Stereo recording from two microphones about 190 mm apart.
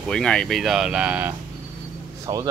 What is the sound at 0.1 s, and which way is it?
Speech, 5° left (ahead or behind).